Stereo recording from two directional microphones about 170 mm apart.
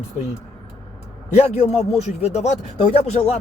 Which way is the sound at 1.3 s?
40° left (ahead or behind).